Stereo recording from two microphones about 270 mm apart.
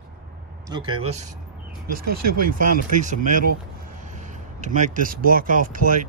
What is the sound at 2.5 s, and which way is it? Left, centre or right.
Speech, right.